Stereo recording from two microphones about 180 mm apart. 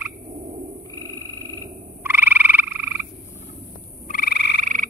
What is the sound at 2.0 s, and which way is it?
Frog, 10° right (ahead or behind).